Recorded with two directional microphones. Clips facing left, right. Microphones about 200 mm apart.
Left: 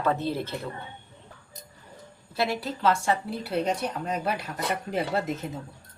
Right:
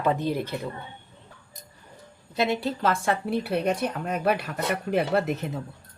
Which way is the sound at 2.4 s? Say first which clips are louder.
Right 3 dB; 20° right (ahead or behind).